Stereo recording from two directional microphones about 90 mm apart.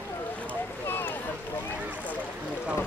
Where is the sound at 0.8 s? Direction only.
25° left (ahead or behind).